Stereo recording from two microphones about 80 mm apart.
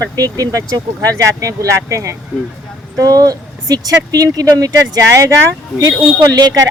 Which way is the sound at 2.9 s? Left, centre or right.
Right.